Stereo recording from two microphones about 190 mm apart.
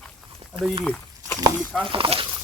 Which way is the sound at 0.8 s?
5° left (ahead or behind).